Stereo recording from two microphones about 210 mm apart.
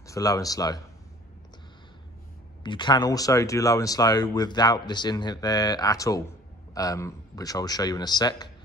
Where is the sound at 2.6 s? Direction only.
20° left (ahead or behind).